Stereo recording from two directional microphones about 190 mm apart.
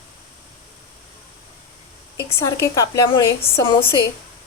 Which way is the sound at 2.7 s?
20° left (ahead or behind).